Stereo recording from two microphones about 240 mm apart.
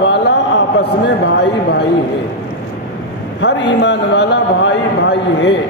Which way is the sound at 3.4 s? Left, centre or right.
Left.